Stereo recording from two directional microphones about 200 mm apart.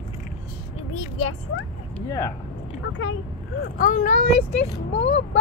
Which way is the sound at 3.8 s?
40° left (ahead or behind).